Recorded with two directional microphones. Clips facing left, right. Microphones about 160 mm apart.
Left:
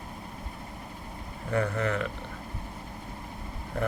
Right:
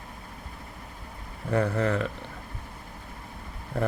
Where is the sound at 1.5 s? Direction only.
30° right (ahead or behind).